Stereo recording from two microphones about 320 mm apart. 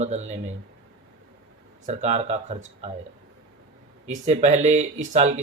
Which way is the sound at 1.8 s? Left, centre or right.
Right.